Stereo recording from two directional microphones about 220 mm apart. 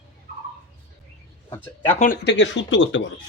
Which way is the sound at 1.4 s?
20° left (ahead or behind).